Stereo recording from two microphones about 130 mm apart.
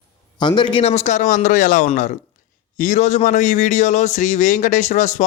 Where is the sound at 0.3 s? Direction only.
35° left (ahead or behind).